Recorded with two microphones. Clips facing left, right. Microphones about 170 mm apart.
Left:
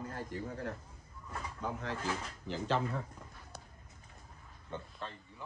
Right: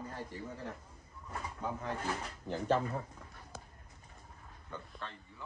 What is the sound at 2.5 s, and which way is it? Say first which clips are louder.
Speech: right 2 dB; 90° left.